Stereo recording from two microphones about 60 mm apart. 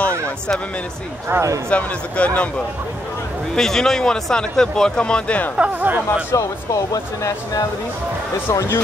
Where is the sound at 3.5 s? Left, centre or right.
Centre.